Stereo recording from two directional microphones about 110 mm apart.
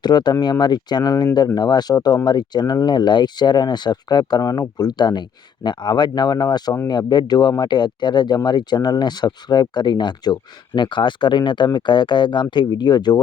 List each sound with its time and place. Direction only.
0.0 s speech: 40° left (ahead or behind)